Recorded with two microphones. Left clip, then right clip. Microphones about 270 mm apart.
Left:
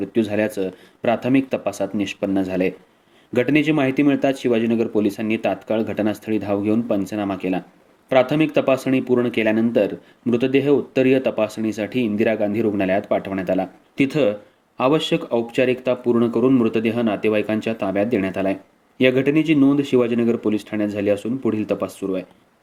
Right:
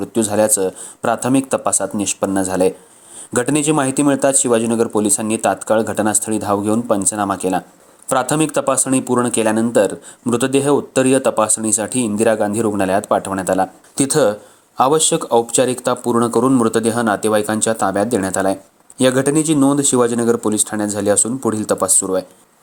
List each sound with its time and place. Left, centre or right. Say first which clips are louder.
0.2 s speech: right 6 dB; centre
14.8 s speech: right 4 dB; right